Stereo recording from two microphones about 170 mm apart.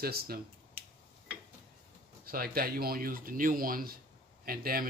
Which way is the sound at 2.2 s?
60° right (ahead or behind).